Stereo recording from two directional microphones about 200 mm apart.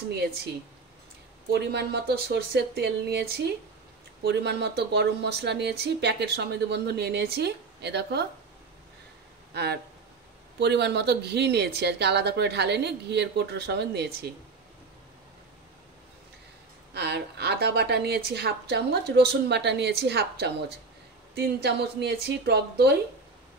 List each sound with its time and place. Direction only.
1.5 s speech: 55° right (ahead or behind)
9.5 s speech: 55° right (ahead or behind)
16.9 s speech: 55° right (ahead or behind)